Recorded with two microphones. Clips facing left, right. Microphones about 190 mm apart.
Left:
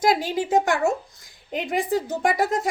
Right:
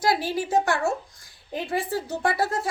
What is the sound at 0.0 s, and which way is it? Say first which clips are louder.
A woman's voice: left 3 dB; 20° left (ahead or behind).